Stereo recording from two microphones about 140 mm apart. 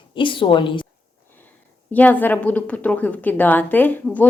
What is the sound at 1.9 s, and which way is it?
A woman's voice, 10° left (ahead or behind).